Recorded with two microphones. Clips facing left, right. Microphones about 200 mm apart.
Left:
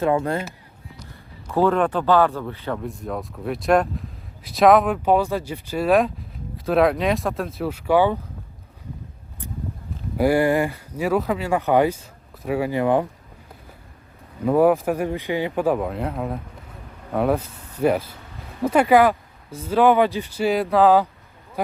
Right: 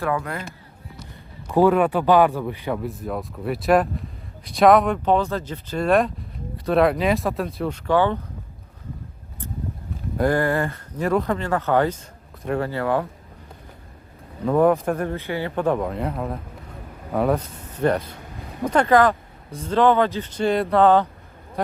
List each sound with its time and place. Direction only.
0.0 s speech: 25° left (ahead or behind)
1.5 s speech: 15° right (ahead or behind)
2.8 s speech: centre (ahead or behind)
10.2 s speech: 10° left (ahead or behind)
14.4 s speech: 10° left (ahead or behind)